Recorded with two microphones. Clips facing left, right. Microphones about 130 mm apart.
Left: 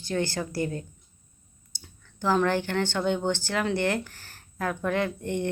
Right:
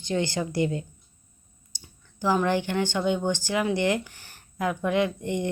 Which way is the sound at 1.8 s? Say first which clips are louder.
Right 2 dB; 10° right (ahead or behind).